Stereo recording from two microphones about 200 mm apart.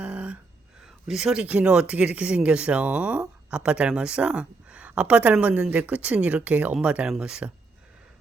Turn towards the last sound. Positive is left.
turn(degrees=-5)  # may be behind; listen again after turning